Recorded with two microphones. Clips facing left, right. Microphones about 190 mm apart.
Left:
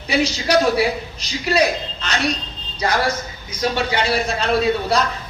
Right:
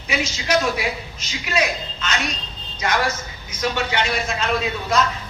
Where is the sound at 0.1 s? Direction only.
35° left (ahead or behind).